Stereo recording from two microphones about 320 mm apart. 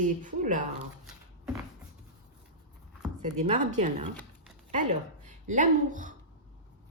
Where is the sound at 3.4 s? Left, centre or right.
Right.